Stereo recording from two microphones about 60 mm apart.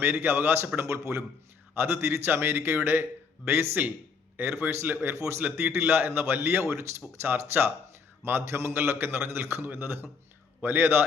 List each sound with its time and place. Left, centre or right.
0.0 s a man's voice: right
1.7 s a man's voice: right
5.1 s speech: right
5.4 s a man's voice: right